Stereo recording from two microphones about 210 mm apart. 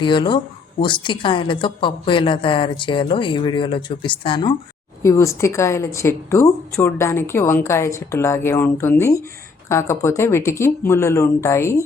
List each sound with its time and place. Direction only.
0.0 s a woman's voice: 20° left (ahead or behind)